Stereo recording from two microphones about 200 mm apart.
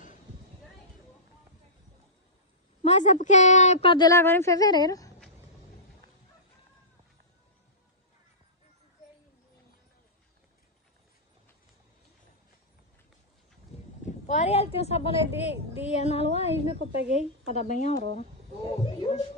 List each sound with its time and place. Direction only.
2.8 s a woman's voice: 35° left (ahead or behind); by 5.1 s 20° left (ahead or behind)
14.0 s speech: 35° left (ahead or behind)